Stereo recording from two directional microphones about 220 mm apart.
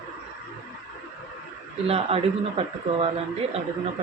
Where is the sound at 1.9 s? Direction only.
25° right (ahead or behind).